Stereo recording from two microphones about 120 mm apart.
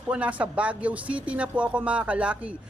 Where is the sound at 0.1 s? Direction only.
10° right (ahead or behind).